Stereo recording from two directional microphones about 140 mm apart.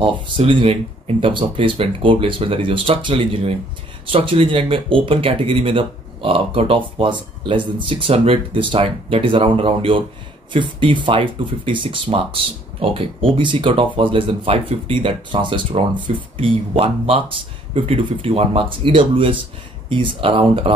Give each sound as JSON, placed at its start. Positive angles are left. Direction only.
{"t": 0.4, "sound": "speech", "side_deg": -40}